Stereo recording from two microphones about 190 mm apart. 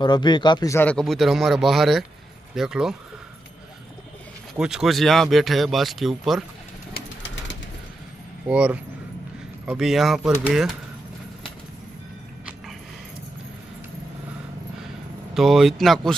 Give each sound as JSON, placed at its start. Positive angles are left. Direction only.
{"t": 0.0, "sound": "a man's voice", "side_deg": 25}
{"t": 4.6, "sound": "a man's voice", "side_deg": -5}
{"t": 6.9, "sound": "pigeon", "side_deg": 70}
{"t": 8.5, "sound": "a man's voice", "side_deg": -5}
{"t": 15.3, "sound": "a man's voice", "side_deg": 0}